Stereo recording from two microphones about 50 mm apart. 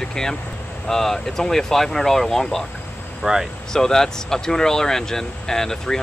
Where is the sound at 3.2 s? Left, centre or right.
Centre.